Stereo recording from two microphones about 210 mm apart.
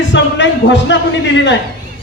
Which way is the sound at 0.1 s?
60° left (ahead or behind).